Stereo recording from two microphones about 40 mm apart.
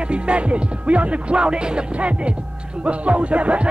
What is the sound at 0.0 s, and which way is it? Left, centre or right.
Music, right.